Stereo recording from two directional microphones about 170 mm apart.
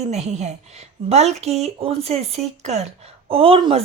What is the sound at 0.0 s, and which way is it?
Speech, 40° right (ahead or behind).